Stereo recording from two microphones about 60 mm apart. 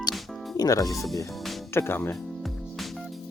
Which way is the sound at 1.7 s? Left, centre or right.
Left.